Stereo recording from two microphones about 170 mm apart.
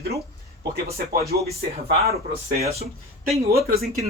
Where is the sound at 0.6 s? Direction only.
65° right (ahead or behind).